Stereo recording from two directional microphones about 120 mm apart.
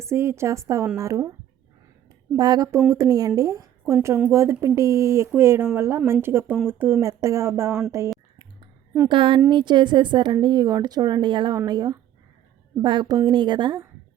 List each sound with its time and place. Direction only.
0.0 s speech: 20° right (ahead or behind)
2.3 s speech: 30° right (ahead or behind)
9.0 s a woman's voice: 45° right (ahead or behind)